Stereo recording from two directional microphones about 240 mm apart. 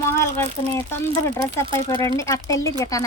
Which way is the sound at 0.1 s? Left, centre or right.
Centre.